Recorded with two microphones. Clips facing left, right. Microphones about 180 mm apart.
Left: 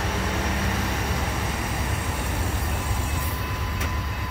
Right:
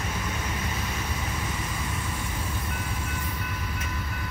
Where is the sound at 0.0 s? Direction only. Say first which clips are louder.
Left 5 dB; 75° left (ahead or behind).